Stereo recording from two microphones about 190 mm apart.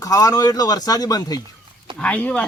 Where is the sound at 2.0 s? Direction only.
10° left (ahead or behind).